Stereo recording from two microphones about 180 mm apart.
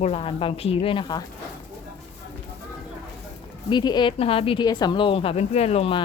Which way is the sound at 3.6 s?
25° left (ahead or behind).